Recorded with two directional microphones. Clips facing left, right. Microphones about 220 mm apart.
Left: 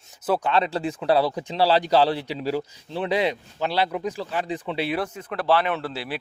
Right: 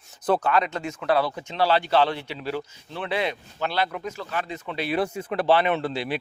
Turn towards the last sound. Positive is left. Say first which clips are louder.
# right 3 dB
turn(degrees=5)  # may be behind; listen again after turning